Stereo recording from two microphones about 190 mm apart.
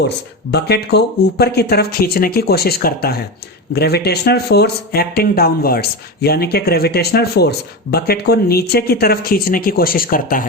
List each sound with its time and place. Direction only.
0.5 s speech: 60° left (ahead or behind)